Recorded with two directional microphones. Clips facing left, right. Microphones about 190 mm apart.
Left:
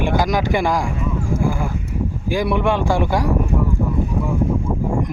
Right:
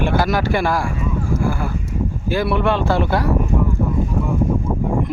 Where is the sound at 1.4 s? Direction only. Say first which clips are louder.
Left 2 dB; 15° left (ahead or behind).